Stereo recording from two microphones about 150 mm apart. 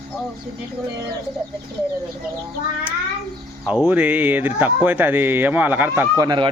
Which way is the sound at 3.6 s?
10° right (ahead or behind).